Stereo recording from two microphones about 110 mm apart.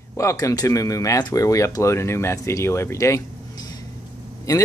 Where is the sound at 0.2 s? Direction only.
30° left (ahead or behind).